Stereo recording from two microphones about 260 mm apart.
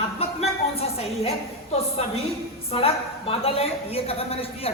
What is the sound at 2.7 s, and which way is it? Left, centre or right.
A woman's voice, left.